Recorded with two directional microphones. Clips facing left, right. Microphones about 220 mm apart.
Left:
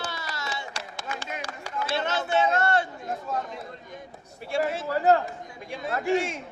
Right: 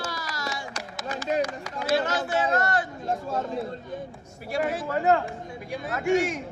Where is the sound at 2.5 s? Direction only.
25° left (ahead or behind).